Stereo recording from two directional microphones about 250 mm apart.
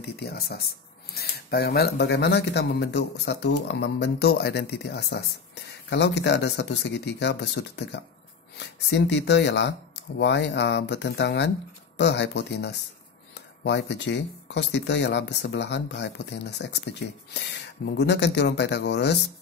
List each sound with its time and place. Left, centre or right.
0.0 s speech: left